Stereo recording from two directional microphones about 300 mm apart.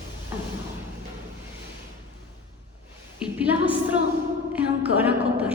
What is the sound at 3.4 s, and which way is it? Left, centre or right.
A woman's voice, centre.